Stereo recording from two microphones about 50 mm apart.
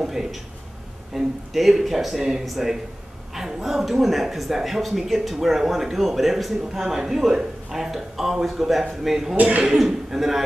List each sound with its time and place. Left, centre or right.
0.0 s speech: centre
9.4 s a man's voice: right
9.8 s speech: centre